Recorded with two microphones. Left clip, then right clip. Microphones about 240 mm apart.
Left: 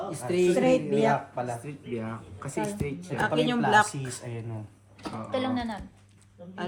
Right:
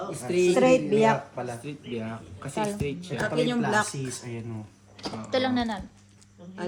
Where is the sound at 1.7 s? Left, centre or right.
Centre.